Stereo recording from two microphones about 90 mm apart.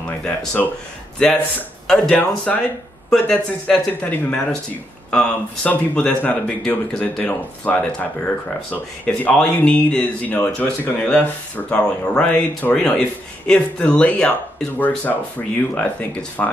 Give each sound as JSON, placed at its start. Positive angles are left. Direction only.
{"t": 0.2, "sound": "speech", "side_deg": 10}
{"t": 2.5, "sound": "speech", "side_deg": 5}